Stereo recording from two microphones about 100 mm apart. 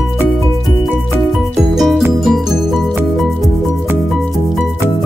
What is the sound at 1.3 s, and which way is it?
Music, centre (ahead or behind).